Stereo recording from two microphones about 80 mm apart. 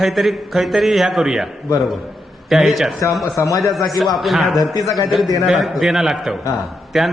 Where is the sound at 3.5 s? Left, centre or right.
Left.